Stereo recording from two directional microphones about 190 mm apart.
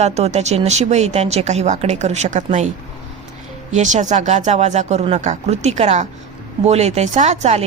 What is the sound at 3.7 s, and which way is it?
A woman's voice, 40° right (ahead or behind).